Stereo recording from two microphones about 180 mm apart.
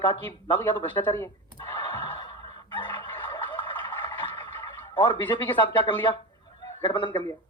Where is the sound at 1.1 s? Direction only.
15° left (ahead or behind).